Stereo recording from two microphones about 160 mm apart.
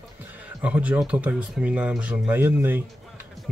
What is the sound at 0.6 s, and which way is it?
Speech, 10° right (ahead or behind).